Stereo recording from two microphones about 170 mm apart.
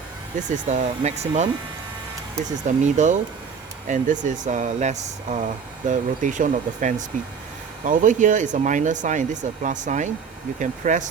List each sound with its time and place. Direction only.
0.3 s speech: 45° right (ahead or behind)